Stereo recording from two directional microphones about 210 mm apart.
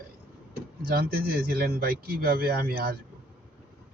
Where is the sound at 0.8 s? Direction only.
45° right (ahead or behind).